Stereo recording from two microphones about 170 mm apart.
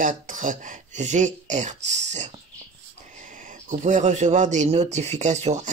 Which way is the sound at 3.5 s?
45° right (ahead or behind).